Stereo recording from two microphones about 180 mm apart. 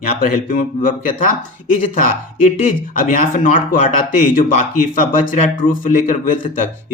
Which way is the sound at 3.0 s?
45° left (ahead or behind).